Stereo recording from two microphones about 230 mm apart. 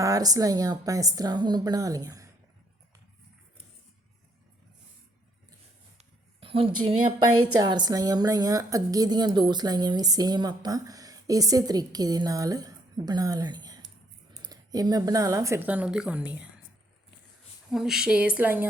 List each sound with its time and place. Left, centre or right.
0.0 s a woman's voice: centre
6.0 s a sound: right
7.6 s a woman's voice: centre
17.7 s speech: centre